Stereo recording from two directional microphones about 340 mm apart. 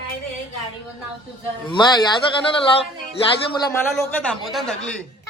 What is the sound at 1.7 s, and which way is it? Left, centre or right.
Speech, centre.